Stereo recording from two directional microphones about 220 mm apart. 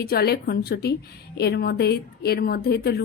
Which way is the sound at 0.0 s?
45° left (ahead or behind).